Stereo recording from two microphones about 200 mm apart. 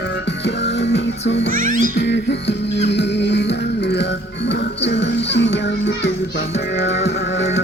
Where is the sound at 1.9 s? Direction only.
60° left (ahead or behind).